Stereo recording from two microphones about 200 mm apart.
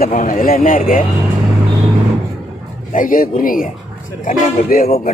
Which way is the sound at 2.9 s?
45° left (ahead or behind).